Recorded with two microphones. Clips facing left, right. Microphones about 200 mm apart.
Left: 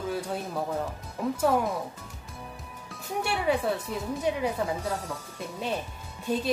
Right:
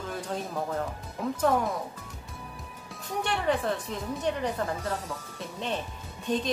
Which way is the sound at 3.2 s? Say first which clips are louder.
Left 1 dB; 10° left (ahead or behind).